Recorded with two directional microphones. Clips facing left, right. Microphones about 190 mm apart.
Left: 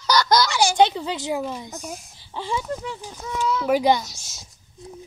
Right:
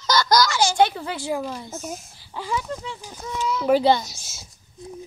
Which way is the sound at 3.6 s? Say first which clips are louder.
Right 2 dB; 10° left (ahead or behind).